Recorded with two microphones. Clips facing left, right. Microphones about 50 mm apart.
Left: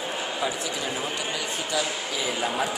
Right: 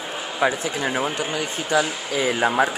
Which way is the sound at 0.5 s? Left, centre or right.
Right.